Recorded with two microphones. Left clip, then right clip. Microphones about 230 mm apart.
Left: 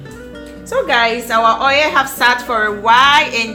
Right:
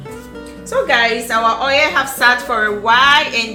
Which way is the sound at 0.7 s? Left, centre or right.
Left.